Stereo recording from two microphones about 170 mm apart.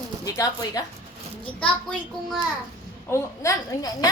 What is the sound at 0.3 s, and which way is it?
Speech, 20° left (ahead or behind).